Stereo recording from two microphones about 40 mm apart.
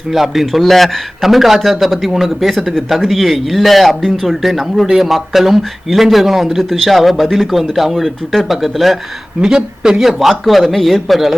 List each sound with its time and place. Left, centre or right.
0.1 s a man's voice: centre
9.4 s speech: centre
10.0 s a man's voice: centre